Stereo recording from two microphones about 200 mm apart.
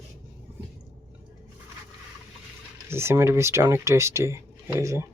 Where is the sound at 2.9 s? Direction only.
10° right (ahead or behind).